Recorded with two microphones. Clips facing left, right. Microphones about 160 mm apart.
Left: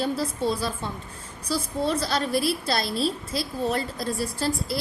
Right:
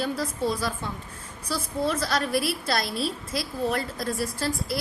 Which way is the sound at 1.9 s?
25° left (ahead or behind).